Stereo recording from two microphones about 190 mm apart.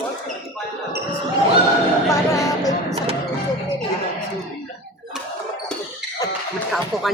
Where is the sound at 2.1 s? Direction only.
15° left (ahead or behind).